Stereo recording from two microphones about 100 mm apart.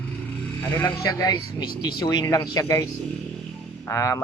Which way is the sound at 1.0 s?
35° left (ahead or behind).